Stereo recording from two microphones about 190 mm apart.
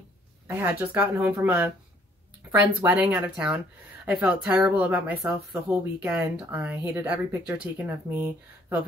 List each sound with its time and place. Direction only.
0.5 s speech: 10° right (ahead or behind)
2.8 s speech: 10° right (ahead or behind)